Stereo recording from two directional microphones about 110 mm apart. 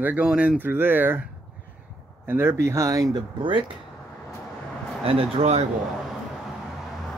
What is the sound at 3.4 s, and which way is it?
Speech, 50° right (ahead or behind).